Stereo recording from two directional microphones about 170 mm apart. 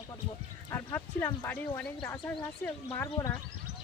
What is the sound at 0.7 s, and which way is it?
Speech, 15° left (ahead or behind).